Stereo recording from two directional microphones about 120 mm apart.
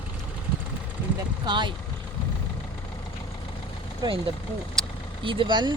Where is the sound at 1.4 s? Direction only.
40° right (ahead or behind).